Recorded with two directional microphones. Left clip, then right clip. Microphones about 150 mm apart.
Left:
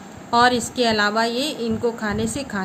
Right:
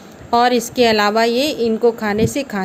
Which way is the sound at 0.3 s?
45° right (ahead or behind).